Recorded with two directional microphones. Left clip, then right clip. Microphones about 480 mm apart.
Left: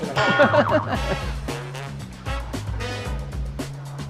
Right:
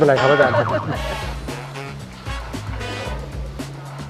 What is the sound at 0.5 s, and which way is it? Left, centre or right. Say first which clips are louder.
Music: left 1 dB; left.